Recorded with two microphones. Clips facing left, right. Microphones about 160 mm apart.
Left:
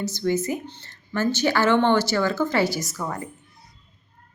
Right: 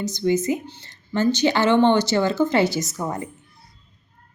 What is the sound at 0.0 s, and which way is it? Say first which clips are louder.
Speech: right 3 dB; 20° right (ahead or behind).